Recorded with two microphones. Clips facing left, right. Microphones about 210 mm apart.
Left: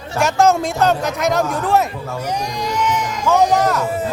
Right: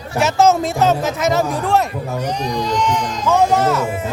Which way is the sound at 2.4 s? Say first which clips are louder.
Right 2 dB; 10° left (ahead or behind).